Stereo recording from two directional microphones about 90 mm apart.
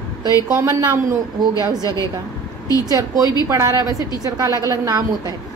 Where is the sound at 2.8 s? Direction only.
40° right (ahead or behind).